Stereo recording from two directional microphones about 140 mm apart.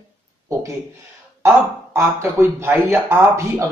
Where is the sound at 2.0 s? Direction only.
20° right (ahead or behind).